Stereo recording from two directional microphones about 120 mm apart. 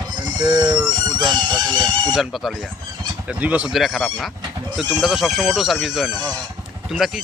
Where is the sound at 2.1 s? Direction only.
Centre (ahead or behind).